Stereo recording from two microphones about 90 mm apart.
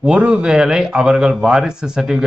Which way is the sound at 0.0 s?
15° right (ahead or behind).